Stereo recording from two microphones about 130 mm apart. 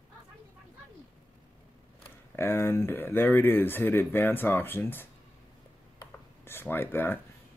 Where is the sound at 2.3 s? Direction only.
20° left (ahead or behind).